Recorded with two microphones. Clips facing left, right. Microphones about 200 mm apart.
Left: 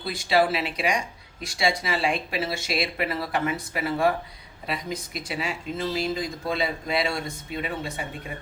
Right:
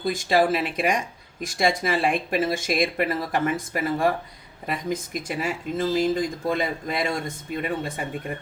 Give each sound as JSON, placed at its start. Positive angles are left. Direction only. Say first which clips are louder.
{"t": 0.0, "sound": "speech", "louder": "right 2 dB", "side_deg": -45}